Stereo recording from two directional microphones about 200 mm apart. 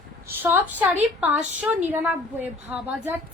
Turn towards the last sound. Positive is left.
turn(degrees=-10)  # may be behind; listen again after turning